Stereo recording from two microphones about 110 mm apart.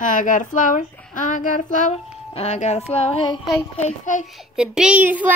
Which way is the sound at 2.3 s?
85° left.